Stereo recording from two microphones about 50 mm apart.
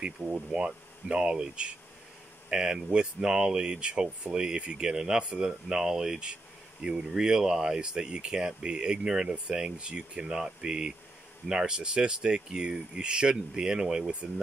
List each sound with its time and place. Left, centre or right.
0.0 s speech: centre